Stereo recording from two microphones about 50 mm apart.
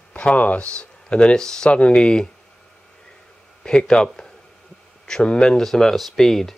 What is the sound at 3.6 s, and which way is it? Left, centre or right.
Speech, centre.